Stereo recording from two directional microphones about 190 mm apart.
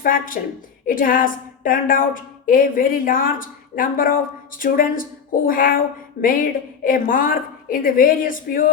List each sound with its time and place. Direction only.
0.0 s a woman's voice: 45° left (ahead or behind)